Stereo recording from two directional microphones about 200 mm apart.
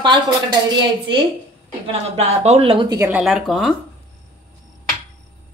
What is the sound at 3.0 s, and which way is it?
Speech, 5° right (ahead or behind).